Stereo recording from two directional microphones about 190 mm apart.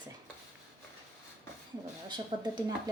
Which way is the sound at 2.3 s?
25° right (ahead or behind).